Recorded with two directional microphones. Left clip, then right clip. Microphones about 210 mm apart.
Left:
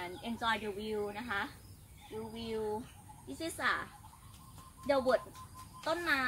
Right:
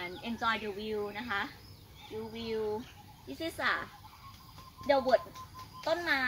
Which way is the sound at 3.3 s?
40° left (ahead or behind).